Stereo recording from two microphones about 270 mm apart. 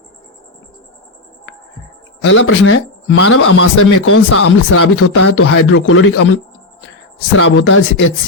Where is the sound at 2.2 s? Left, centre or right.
Left.